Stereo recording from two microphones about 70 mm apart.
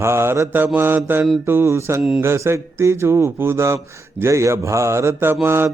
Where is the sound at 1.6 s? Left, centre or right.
Right.